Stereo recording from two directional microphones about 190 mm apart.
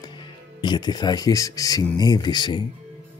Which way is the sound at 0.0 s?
25° left (ahead or behind).